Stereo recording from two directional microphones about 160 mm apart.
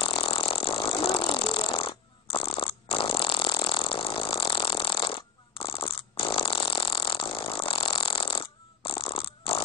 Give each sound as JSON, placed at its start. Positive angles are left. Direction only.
{"t": 0.0, "sound": "engine", "side_deg": 30}